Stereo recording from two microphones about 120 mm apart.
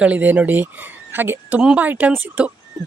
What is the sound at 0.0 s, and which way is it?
Speech, 15° right (ahead or behind).